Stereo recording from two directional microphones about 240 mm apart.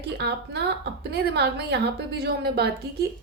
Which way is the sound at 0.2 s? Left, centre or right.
Right.